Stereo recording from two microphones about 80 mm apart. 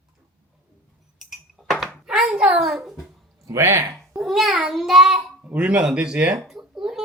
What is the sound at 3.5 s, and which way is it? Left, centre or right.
Speech, right.